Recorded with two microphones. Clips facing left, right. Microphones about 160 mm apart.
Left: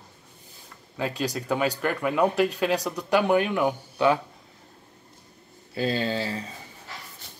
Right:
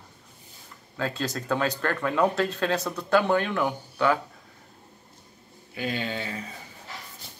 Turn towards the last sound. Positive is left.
turn(degrees=30)  # may be behind; listen again after turning